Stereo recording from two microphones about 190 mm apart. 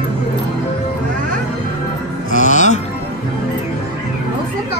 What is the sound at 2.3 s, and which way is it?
Music, 40° left (ahead or behind).